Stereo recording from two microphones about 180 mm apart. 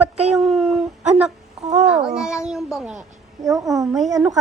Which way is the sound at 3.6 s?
Centre (ahead or behind).